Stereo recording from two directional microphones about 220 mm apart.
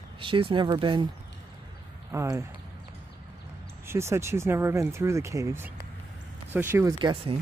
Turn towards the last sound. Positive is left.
turn(degrees=-20)  # may be behind; listen again after turning